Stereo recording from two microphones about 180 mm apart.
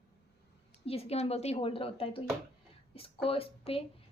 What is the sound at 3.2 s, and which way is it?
Speech, 30° left (ahead or behind).